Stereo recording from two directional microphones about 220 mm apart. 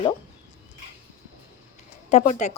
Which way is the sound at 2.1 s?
35° left (ahead or behind).